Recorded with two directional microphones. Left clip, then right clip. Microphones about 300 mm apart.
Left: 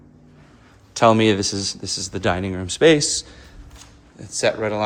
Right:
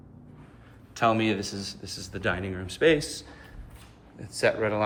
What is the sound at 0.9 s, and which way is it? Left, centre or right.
Speech, left.